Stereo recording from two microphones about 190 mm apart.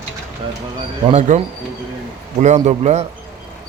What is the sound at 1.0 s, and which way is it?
Speech, 40° right (ahead or behind).